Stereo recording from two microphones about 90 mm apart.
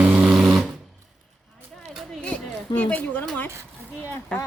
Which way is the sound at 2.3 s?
15° left (ahead or behind).